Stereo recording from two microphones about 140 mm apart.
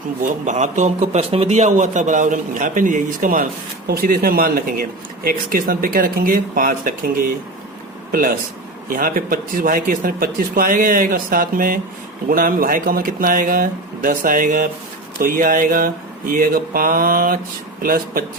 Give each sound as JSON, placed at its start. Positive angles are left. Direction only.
{"t": 0.2, "sound": "a man's voice", "side_deg": -60}
{"t": 3.8, "sound": "speech", "side_deg": -90}